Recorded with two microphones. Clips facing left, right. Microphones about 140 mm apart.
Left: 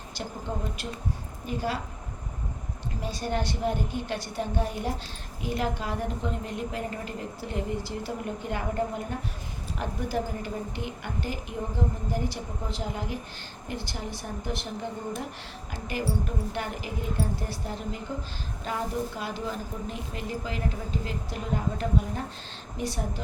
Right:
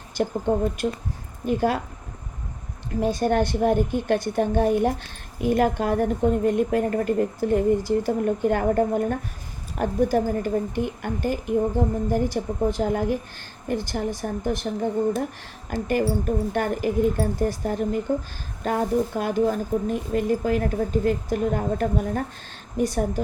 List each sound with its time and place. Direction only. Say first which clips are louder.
0.2 s a woman's voice: right 12 dB; 50° right (ahead or behind)
2.9 s a woman's voice: right 10 dB; 50° right (ahead or behind)